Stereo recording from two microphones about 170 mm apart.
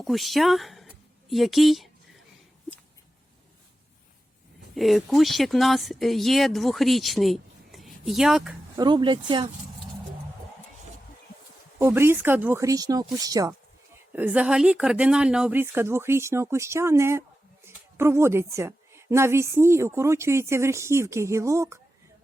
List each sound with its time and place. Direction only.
0.0 s speech: centre (ahead or behind)
4.7 s speech: centre (ahead or behind)
8.7 s speech: 25° right (ahead or behind)
11.8 s speech: 15° right (ahead or behind)
14.1 s a woman's voice: 10° right (ahead or behind)